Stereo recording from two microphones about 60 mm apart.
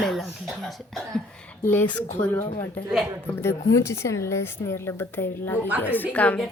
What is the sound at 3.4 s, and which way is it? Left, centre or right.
A woman's voice, left.